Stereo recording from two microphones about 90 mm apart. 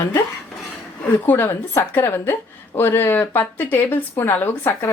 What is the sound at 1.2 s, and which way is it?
Speech, 25° left (ahead or behind).